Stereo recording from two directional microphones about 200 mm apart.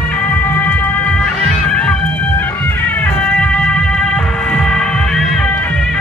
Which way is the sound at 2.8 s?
10° left (ahead or behind).